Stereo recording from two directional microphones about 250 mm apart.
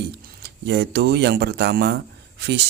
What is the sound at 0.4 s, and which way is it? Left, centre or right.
Speech, right.